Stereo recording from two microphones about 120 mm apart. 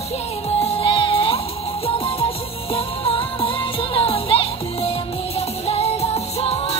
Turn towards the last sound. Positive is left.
turn(degrees=55)  # may be behind; listen again after turning